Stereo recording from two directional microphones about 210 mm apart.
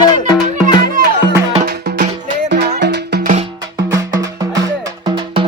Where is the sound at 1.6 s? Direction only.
50° right (ahead or behind).